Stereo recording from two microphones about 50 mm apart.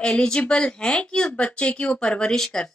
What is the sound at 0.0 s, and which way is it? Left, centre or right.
Speech, centre.